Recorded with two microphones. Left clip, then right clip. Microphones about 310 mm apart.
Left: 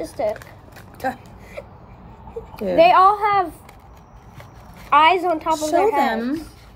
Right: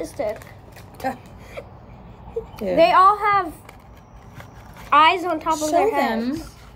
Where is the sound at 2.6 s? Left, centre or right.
Centre.